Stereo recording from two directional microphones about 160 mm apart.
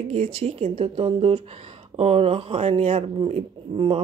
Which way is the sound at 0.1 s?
35° right (ahead or behind).